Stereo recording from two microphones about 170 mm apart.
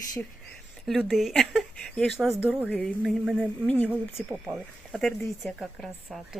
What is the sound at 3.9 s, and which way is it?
A woman's voice, 10° right (ahead or behind).